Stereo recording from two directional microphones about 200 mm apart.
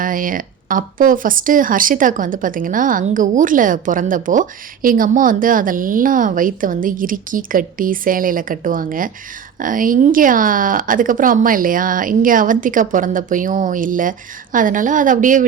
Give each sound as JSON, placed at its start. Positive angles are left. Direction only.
{"t": 0.0, "sound": "speech", "side_deg": -40}